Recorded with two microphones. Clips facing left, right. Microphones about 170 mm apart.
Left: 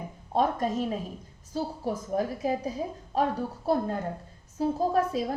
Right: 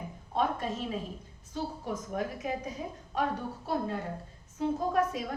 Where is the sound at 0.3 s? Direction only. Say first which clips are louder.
Left 5 dB; 40° left (ahead or behind).